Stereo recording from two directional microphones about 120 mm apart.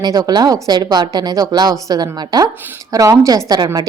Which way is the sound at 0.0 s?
35° right (ahead or behind).